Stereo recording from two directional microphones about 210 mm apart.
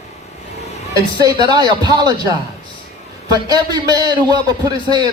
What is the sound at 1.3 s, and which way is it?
A man's voice, 20° right (ahead or behind).